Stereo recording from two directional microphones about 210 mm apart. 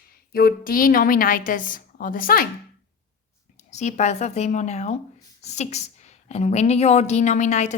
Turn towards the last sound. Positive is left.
turn(degrees=35)  # may be behind; listen again after turning